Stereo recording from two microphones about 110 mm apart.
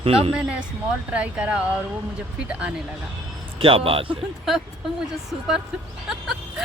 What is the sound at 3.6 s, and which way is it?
Speech, 55° right (ahead or behind).